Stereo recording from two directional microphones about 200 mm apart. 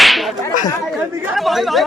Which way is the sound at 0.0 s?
Centre (ahead or behind).